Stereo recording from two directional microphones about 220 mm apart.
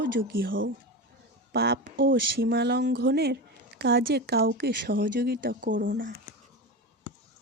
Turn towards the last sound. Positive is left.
turn(degrees=-40)  # may be behind; listen again after turning